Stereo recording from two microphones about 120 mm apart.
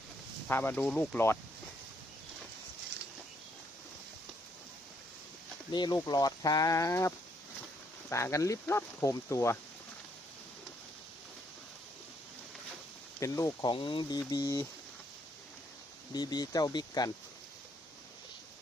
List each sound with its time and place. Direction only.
0.4 s speech: 20° left (ahead or behind)
5.7 s speech: 35° left (ahead or behind)
8.1 s speech: 25° left (ahead or behind)
13.1 s speech: 25° left (ahead or behind)
13.7 s speech: 45° left (ahead or behind)
14.2 s speech: 25° left (ahead or behind)
16.1 s speech: 35° left (ahead or behind)